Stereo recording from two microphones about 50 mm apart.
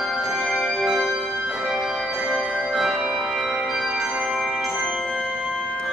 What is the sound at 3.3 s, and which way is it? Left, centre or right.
Music, centre.